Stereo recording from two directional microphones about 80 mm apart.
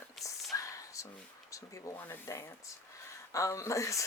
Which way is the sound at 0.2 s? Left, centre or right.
Centre.